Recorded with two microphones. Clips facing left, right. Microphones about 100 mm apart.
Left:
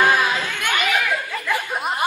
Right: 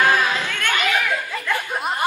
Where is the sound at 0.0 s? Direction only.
15° left (ahead or behind).